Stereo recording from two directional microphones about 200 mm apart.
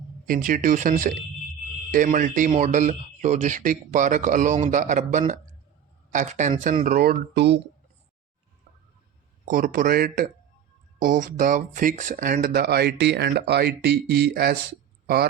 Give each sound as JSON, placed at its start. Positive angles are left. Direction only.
{"t": 0.3, "sound": "speech", "side_deg": -45}
{"t": 9.5, "sound": "speech", "side_deg": -45}